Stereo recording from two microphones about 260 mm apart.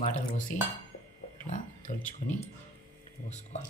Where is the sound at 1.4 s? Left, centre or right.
Left.